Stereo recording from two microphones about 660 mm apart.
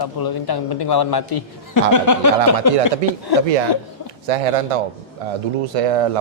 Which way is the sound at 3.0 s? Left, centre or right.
Right.